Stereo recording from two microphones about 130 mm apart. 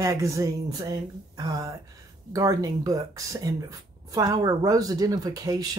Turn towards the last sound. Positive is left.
turn(degrees=-30)  # may be behind; listen again after turning